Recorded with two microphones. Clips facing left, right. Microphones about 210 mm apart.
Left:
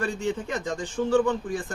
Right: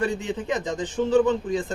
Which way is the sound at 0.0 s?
20° right (ahead or behind).